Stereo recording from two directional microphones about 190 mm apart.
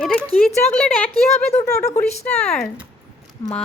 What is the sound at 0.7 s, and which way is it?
A woman's voice, 10° left (ahead or behind).